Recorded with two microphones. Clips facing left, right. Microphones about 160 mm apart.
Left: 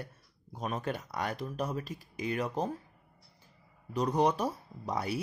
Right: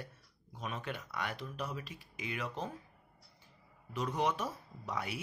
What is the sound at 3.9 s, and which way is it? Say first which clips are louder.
Speech: left 6 dB; 40° left (ahead or behind).